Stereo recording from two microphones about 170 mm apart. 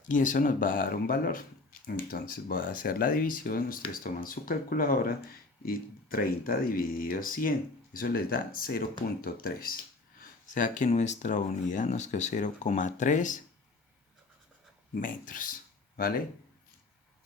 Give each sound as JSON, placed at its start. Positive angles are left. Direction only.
{"t": 0.0, "sound": "speech", "side_deg": 50}
{"t": 15.0, "sound": "speech", "side_deg": 50}